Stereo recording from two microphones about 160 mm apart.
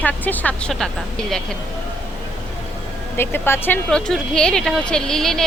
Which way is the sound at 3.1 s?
15° left (ahead or behind).